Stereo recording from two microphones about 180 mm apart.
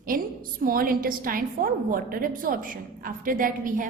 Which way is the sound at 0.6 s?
55° right (ahead or behind).